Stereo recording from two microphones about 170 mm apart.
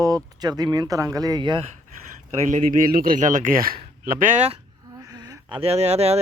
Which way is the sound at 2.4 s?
50° right (ahead or behind).